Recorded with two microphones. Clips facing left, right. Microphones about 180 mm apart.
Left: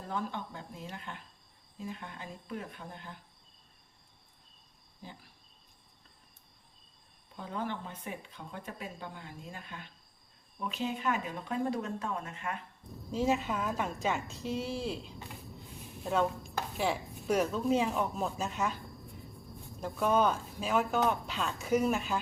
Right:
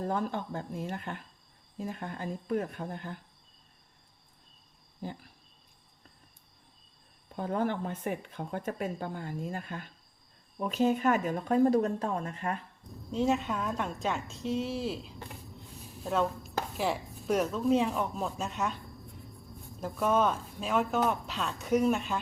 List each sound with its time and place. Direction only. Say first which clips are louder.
0.1 s speech: right 5 dB; 45° right (ahead or behind)
7.3 s speech: right 7 dB; 55° right (ahead or behind)
13.1 s speech: right 2 dB; centre (ahead or behind)
19.8 s speech: right 1 dB; centre (ahead or behind)